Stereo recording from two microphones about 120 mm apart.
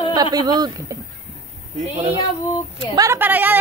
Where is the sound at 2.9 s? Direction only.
25° right (ahead or behind).